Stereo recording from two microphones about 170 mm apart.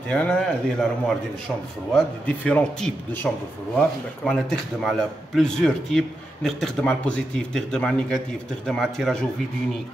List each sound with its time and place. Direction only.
0.1 s a man's voice: 5° left (ahead or behind)